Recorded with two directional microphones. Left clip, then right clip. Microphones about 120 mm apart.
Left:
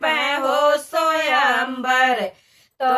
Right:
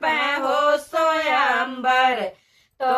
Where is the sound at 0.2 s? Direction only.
40° left (ahead or behind).